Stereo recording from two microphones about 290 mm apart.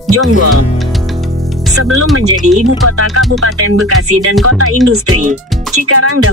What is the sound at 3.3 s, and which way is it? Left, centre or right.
Speech, right.